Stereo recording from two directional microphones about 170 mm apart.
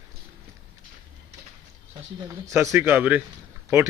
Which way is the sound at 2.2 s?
15° right (ahead or behind).